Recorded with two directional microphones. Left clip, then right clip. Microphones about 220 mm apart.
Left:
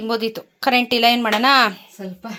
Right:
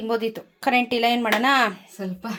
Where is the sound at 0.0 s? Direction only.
Centre (ahead or behind).